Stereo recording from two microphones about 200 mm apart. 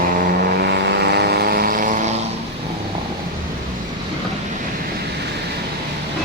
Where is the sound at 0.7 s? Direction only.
55° right (ahead or behind).